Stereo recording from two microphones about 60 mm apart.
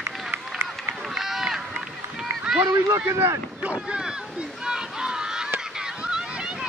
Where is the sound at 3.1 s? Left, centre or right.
Right.